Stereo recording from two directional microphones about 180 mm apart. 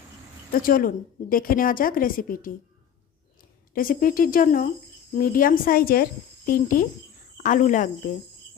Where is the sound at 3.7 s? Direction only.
50° left (ahead or behind).